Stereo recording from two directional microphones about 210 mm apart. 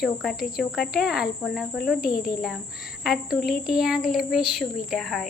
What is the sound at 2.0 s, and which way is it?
Speech, 45° left (ahead or behind).